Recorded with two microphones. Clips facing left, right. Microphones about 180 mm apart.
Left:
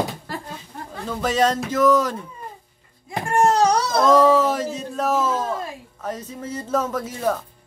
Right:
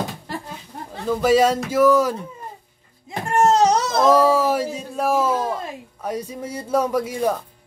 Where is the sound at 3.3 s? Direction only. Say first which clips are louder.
Right 1 dB; 25° right (ahead or behind).